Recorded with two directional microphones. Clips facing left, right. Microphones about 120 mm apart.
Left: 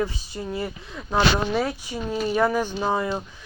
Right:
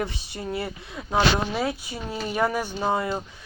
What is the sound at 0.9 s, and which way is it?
Speech, 10° right (ahead or behind).